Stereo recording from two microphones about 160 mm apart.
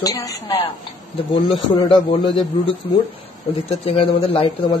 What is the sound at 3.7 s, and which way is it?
Speech, 40° left (ahead or behind).